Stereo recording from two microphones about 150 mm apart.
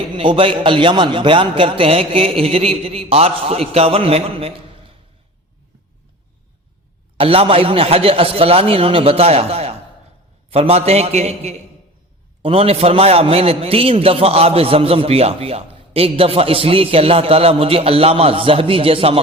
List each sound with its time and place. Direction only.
0.2 s a man's voice: 35° right (ahead or behind)
7.2 s a man's voice: 40° right (ahead or behind)